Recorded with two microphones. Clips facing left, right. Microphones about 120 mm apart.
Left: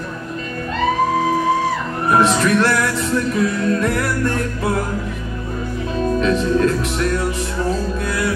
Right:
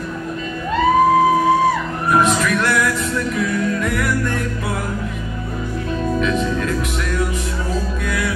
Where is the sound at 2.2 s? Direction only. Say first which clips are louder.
Left 2 dB; 30° left (ahead or behind).